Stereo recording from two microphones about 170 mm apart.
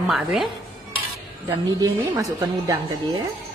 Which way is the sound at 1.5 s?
15° right (ahead or behind).